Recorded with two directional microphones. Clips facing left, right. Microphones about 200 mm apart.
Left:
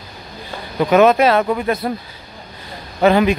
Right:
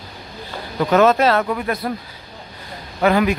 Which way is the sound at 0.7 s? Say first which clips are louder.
Left 3 dB; 15° left (ahead or behind).